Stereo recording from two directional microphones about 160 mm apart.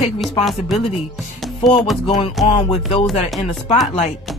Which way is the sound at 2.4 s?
35° left (ahead or behind).